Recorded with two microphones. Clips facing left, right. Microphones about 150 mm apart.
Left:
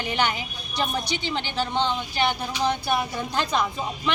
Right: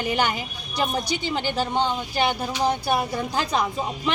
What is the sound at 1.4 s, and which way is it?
Speech, 40° right (ahead or behind).